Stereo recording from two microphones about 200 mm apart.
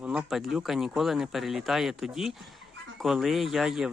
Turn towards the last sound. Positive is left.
turn(degrees=0)  # may be behind; listen again after turning